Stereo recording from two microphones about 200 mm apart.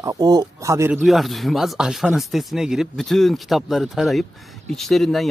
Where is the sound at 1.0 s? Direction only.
Centre (ahead or behind).